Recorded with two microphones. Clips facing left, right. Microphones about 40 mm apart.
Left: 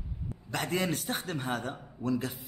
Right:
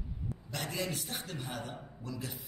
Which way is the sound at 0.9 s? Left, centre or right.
Left.